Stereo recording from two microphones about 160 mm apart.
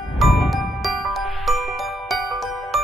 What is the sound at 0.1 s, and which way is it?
Music, centre (ahead or behind).